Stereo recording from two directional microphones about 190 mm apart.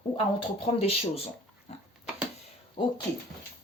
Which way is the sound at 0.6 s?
30° left (ahead or behind).